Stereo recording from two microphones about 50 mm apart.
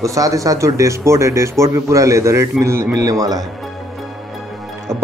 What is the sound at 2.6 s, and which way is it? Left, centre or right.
Speech, right.